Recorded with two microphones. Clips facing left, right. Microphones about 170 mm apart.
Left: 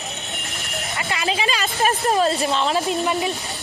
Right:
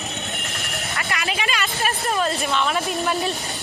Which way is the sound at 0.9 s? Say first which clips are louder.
Left 3 dB; 25° left (ahead or behind).